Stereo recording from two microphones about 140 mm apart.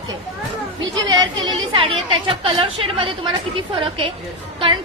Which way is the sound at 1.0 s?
40° right (ahead or behind).